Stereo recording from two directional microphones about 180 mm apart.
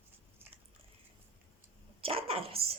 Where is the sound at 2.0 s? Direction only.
30° right (ahead or behind).